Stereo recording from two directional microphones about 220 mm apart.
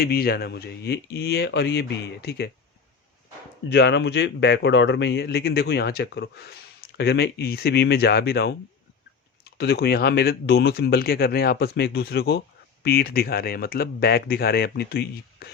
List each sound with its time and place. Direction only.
0.0 s a man's voice: 45° left (ahead or behind)
3.7 s a man's voice: 50° left (ahead or behind)